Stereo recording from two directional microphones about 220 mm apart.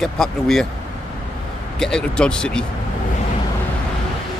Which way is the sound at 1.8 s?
5° left (ahead or behind).